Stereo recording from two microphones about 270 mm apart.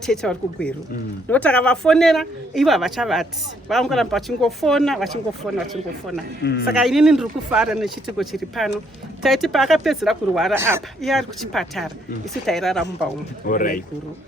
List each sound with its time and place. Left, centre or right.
0.0 s speech: centre
6.4 s speech: left
6.7 s speech: centre
13.4 s speech: left